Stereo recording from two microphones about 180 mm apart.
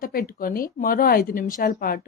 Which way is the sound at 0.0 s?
55° left (ahead or behind).